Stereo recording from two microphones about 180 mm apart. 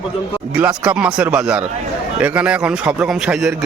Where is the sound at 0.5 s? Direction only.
5° right (ahead or behind).